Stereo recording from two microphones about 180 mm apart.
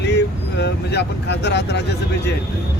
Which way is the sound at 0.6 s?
70° left (ahead or behind).